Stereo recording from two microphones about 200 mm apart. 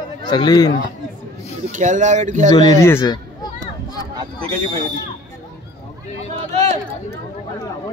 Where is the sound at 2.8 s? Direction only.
15° left (ahead or behind).